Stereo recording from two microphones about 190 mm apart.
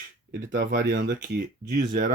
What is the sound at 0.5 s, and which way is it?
Speech, 75° right (ahead or behind).